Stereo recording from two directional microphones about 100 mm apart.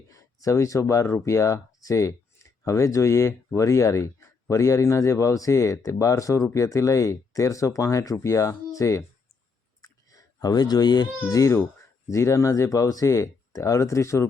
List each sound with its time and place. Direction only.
0.1 s speech: 30° left (ahead or behind)
9.8 s a sound: 35° left (ahead or behind)
11.3 s speech: 35° left (ahead or behind)